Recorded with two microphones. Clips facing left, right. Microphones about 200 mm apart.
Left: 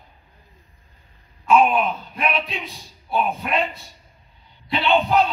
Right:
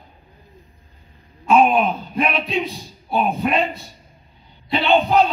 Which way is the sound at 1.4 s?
40° right (ahead or behind).